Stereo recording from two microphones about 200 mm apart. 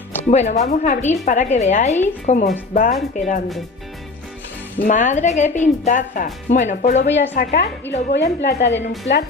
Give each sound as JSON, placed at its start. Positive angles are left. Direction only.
{"t": 0.3, "sound": "a woman's voice", "side_deg": 35}
{"t": 4.7, "sound": "a woman's voice", "side_deg": 40}
{"t": 7.4, "sound": "a woman's voice", "side_deg": 50}
{"t": 7.9, "sound": "a woman's voice", "side_deg": 60}